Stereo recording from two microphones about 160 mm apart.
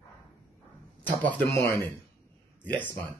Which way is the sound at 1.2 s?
10° left (ahead or behind).